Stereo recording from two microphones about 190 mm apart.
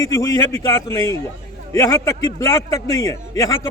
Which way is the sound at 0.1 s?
15° left (ahead or behind).